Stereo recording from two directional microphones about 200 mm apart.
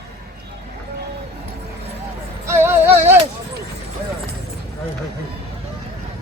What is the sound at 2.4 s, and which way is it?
Music, 10° right (ahead or behind).